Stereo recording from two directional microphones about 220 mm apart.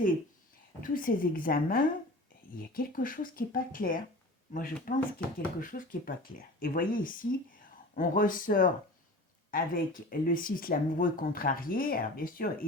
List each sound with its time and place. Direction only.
0.8 s speech: 40° left (ahead or behind)